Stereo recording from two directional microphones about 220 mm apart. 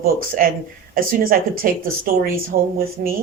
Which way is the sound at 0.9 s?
40° right (ahead or behind).